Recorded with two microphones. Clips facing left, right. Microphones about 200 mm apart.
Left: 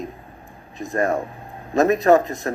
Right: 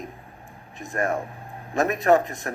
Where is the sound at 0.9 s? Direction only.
35° left (ahead or behind).